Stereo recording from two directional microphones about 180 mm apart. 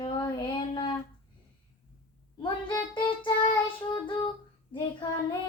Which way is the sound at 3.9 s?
25° left (ahead or behind).